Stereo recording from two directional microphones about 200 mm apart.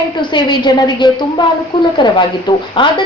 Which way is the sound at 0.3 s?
20° left (ahead or behind).